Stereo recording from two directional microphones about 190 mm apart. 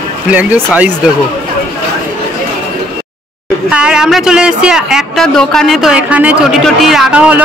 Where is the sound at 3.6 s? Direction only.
5° right (ahead or behind).